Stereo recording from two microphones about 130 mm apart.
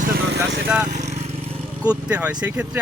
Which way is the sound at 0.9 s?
65° right (ahead or behind).